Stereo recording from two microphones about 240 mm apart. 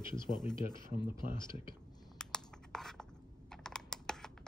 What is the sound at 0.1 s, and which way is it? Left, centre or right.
Speech, centre.